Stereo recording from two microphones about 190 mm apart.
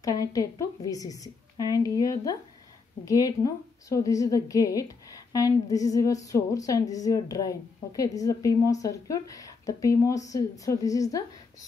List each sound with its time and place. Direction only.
0.0 s a woman's voice: 20° left (ahead or behind)